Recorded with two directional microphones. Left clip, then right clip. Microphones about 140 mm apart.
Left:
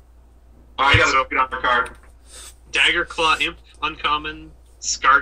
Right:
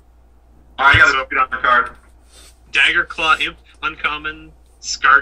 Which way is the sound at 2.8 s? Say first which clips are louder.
Right 3 dB; 20° right (ahead or behind).